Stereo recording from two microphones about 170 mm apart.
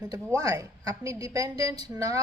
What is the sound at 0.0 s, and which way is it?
Speech, 20° right (ahead or behind).